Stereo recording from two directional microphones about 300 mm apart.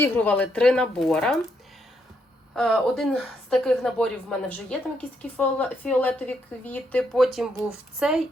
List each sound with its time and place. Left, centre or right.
0.0 s a woman's voice: centre
2.5 s a woman's voice: centre